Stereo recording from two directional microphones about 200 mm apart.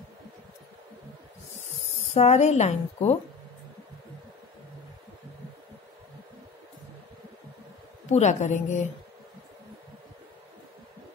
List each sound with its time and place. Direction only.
2.1 s a woman's voice: 35° left (ahead or behind)
8.1 s a woman's voice: 35° left (ahead or behind)